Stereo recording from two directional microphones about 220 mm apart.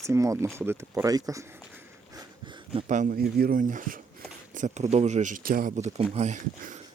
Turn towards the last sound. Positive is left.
turn(degrees=-35)  # may be behind; listen again after turning